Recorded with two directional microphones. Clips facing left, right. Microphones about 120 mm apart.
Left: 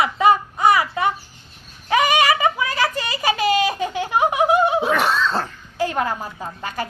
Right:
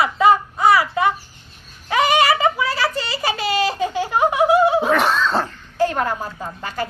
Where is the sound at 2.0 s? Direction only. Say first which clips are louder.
Right 3 dB; 15° left (ahead or behind).